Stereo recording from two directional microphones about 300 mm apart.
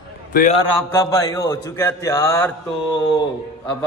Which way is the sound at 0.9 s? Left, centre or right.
Centre.